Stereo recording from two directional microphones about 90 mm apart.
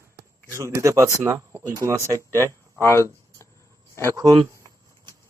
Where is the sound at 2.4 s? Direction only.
30° left (ahead or behind).